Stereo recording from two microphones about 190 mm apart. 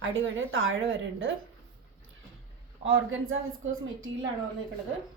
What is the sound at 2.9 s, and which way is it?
Speech, 90° right.